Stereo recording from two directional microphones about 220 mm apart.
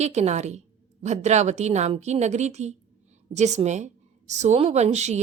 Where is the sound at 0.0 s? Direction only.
30° right (ahead or behind).